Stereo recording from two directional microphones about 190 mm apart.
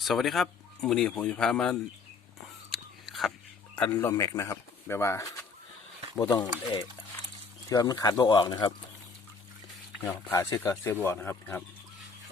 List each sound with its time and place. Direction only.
0.0 s speech: centre (ahead or behind)
2.6 s biting: centre (ahead or behind)
3.8 s speech: 10° left (ahead or behind)
7.7 s speech: 20° left (ahead or behind)
10.1 s speech: 10° left (ahead or behind)